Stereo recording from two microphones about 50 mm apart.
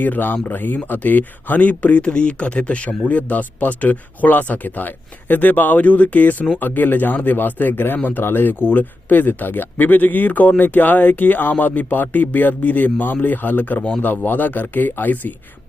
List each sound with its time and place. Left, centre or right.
0.0 s speech: left
6.6 s speech: left